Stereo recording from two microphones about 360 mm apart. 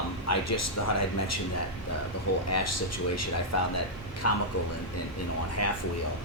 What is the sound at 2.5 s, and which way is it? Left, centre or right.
Speech, left.